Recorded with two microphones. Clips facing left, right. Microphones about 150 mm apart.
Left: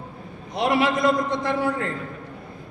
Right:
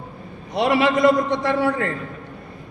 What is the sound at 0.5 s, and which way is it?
A man's voice, 75° right (ahead or behind).